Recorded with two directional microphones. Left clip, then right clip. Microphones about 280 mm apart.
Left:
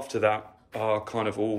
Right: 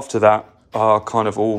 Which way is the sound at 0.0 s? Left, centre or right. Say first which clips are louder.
Right 11 dB; centre.